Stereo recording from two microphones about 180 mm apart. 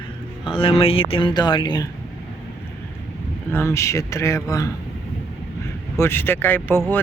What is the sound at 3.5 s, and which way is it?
Speech, 15° left (ahead or behind).